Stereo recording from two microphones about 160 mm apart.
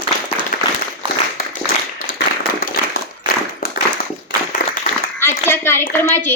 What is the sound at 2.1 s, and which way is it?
Clapping, 65° left (ahead or behind).